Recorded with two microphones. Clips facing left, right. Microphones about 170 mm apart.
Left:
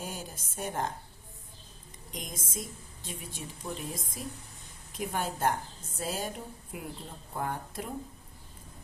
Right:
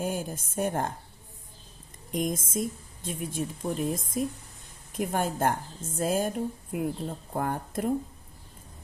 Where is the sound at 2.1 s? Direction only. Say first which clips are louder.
Right 12 dB; 50° right (ahead or behind).